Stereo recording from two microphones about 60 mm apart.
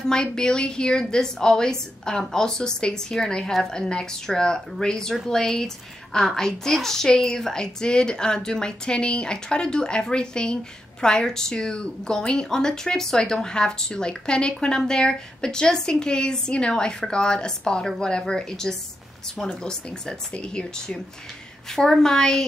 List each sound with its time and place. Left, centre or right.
0.1 s a woman's voice: centre